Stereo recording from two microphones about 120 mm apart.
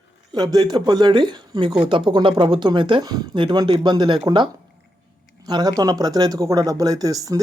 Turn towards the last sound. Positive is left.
turn(degrees=-30)  # may be behind; listen again after turning